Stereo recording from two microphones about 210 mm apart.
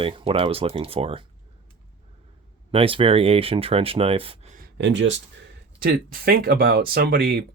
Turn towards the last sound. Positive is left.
turn(degrees=-45)  # may be behind; listen again after turning